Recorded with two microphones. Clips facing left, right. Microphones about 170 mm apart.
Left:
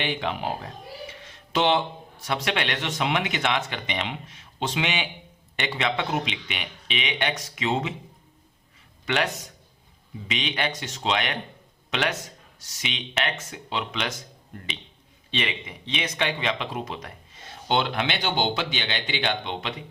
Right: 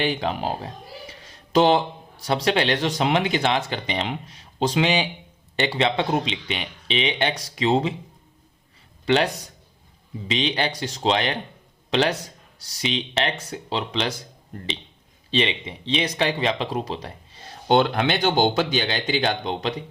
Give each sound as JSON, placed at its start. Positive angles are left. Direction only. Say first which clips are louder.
{"t": 0.0, "sound": "speech", "louder": "right 4 dB", "side_deg": -35}
{"t": 9.0, "sound": "speech", "louder": "right 6 dB", "side_deg": -30}
{"t": 15.3, "sound": "speech", "louder": "right 6 dB", "side_deg": -30}